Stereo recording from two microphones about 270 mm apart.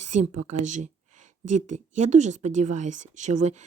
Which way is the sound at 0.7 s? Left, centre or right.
Right.